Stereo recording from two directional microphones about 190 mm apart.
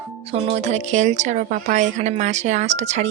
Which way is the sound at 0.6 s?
35° right (ahead or behind).